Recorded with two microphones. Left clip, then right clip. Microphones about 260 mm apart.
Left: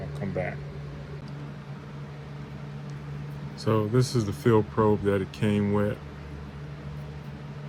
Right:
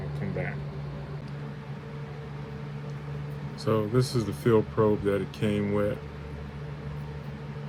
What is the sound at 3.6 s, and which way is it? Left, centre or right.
Speech, left.